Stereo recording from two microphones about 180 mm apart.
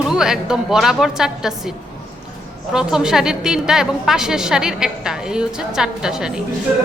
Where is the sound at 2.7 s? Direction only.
5° right (ahead or behind).